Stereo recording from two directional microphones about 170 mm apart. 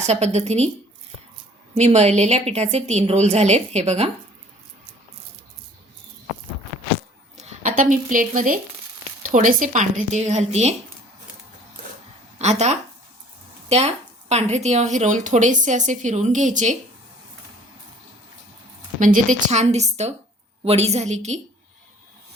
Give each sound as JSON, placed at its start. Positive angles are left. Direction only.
{"t": 0.0, "sound": "a woman's voice", "side_deg": -40}
{"t": 1.7, "sound": "a woman's voice", "side_deg": -40}
{"t": 7.3, "sound": "a woman's voice", "side_deg": -45}
{"t": 12.4, "sound": "a woman's voice", "side_deg": -40}
{"t": 18.9, "sound": "a woman's voice", "side_deg": -50}